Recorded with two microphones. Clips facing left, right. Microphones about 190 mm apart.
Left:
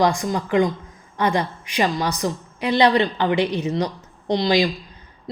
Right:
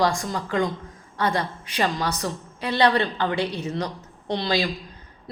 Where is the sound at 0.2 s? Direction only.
15° left (ahead or behind).